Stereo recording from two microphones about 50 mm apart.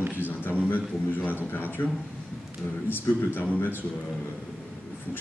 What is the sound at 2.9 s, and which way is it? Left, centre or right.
Speech, left.